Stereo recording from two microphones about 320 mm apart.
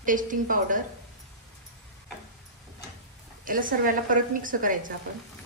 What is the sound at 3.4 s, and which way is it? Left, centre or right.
A woman's voice, right.